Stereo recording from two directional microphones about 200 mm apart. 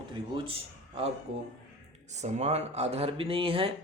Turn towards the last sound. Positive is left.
turn(degrees=-25)  # may be behind; listen again after turning